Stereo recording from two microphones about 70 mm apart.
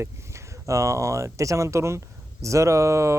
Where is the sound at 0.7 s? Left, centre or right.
Right.